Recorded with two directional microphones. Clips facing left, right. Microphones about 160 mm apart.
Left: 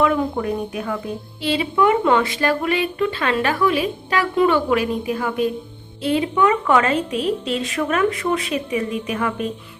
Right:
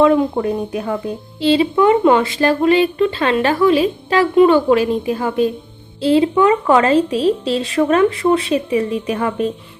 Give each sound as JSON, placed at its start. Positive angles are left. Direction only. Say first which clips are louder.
{"t": 0.0, "sound": "a woman's voice", "louder": "right 6 dB", "side_deg": -30}